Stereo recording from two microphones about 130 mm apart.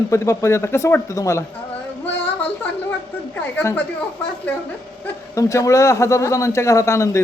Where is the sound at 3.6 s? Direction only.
10° left (ahead or behind).